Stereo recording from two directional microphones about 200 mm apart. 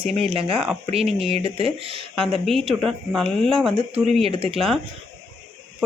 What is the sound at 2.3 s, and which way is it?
Speech, centre (ahead or behind).